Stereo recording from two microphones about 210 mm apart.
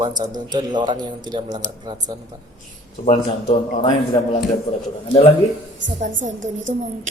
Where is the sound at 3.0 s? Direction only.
30° left (ahead or behind).